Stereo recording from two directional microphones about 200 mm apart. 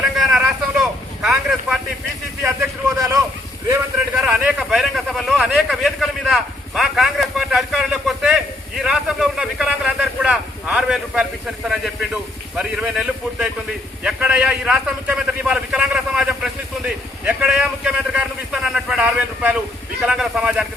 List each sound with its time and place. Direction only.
0.2 s boat: centre (ahead or behind)
2.4 s boat: 15° right (ahead or behind)
4.2 s speech: 5° right (ahead or behind)